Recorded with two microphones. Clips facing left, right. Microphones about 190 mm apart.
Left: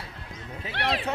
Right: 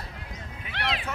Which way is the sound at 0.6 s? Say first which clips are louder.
Left 4 dB; 35° left (ahead or behind).